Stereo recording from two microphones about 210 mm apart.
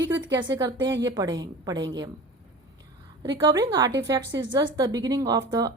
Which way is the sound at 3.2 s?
20° right (ahead or behind).